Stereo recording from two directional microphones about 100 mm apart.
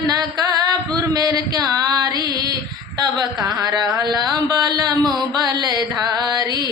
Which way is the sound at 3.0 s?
40° right (ahead or behind).